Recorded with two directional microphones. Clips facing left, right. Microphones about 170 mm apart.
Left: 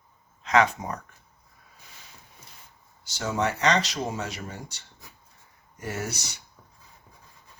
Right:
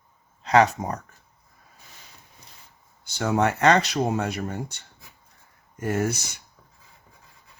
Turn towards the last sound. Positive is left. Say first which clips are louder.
# right 8 dB
turn(degrees=-50)  # may be behind; listen again after turning